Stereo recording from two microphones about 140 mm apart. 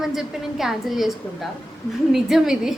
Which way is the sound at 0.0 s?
Centre (ahead or behind).